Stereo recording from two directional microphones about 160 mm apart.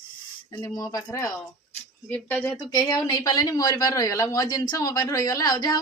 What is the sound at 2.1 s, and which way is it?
Speech, 10° left (ahead or behind).